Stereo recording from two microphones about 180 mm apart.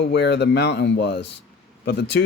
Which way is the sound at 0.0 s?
70° left (ahead or behind).